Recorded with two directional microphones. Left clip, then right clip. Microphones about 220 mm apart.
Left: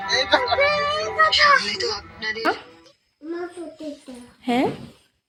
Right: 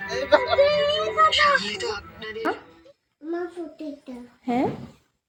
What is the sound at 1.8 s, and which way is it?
Speech, 45° right (ahead or behind).